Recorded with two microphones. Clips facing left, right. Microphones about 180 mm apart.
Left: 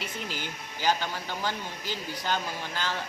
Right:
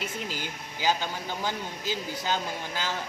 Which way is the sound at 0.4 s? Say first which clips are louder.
Even; 10° right (ahead or behind).